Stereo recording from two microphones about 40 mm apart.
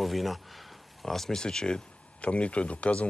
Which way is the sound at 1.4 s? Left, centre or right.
Left.